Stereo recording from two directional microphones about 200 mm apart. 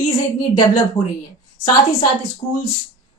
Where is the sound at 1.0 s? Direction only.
20° left (ahead or behind).